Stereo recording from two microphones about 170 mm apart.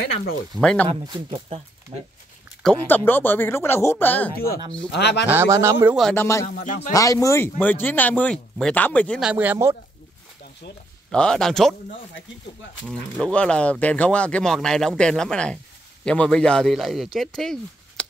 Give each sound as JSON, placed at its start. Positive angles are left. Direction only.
{"t": 0.6, "sound": "speech", "side_deg": 5}
{"t": 0.8, "sound": "speech", "side_deg": -25}
{"t": 2.6, "sound": "speech", "side_deg": 10}
{"t": 4.9, "sound": "speech", "side_deg": 80}
{"t": 5.3, "sound": "a man's voice", "side_deg": -15}
{"t": 6.1, "sound": "speech", "side_deg": 15}
{"t": 6.4, "sound": "speech", "side_deg": 50}
{"t": 6.9, "sound": "speech", "side_deg": 20}
{"t": 9.2, "sound": "a man's voice", "side_deg": -10}
{"t": 11.1, "sound": "speech", "side_deg": 5}
{"t": 12.8, "sound": "speech", "side_deg": 5}